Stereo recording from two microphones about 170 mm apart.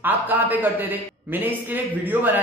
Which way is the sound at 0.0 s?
10° right (ahead or behind).